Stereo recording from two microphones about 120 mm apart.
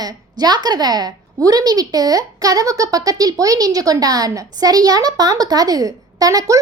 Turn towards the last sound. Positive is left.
turn(degrees=-30)  # may be behind; listen again after turning